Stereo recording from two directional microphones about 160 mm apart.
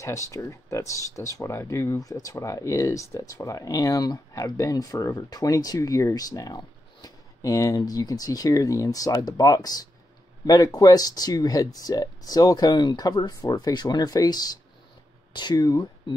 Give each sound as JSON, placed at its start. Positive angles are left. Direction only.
{"t": 0.0, "sound": "speech", "side_deg": 20}